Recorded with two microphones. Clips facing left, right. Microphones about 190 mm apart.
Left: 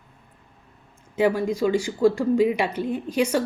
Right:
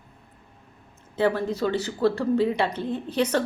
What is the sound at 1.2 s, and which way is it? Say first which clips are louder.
Speech: left 2 dB; 10° left (ahead or behind).